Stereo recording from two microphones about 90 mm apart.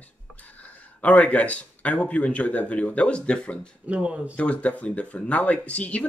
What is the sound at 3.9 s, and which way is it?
Speech, 15° right (ahead or behind).